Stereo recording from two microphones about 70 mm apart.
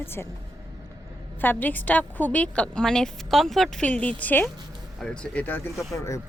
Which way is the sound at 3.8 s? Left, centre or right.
Centre.